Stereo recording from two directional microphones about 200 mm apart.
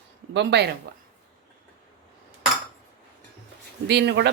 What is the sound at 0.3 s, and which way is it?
Speech, 55° right (ahead or behind).